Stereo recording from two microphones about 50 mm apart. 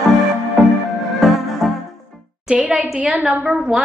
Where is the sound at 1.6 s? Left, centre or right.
Centre.